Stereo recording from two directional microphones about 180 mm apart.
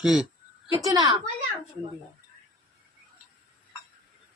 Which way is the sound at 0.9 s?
25° right (ahead or behind).